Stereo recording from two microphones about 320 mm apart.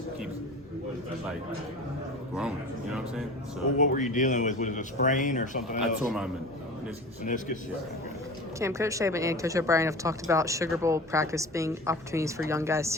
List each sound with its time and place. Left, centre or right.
3.8 s a man's voice: left
5.8 s speech: centre
7.3 s a man's voice: left
8.5 s speech: centre